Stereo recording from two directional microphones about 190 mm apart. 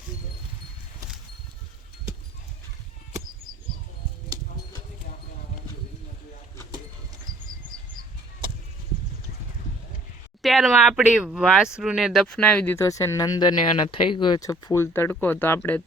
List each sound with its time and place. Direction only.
10.4 s speech: centre (ahead or behind)